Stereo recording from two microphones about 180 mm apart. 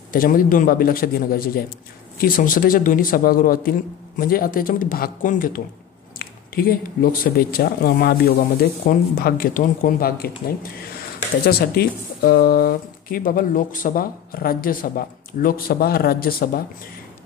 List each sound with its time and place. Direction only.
0.1 s speech: 50° left (ahead or behind)